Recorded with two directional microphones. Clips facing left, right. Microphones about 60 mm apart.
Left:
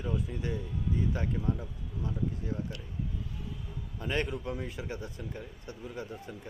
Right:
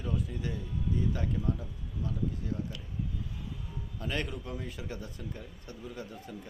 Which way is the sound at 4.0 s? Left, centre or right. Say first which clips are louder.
Left 3 dB; left.